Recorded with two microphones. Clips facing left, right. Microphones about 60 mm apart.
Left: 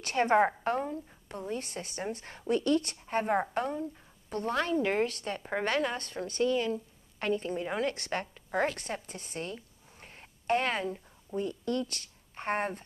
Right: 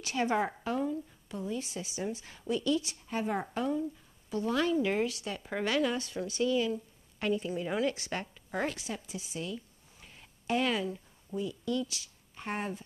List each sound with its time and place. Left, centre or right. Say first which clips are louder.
0.0 s a woman's voice: left 5 dB; left
5.4 s speech: left 2 dB; left
5.7 s a woman's voice: right 2 dB; left
9.6 s a sound: left 1 dB; left
11.3 s speech: left 1 dB; left